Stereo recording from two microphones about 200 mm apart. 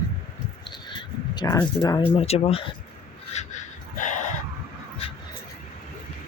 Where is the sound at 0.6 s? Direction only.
25° left (ahead or behind).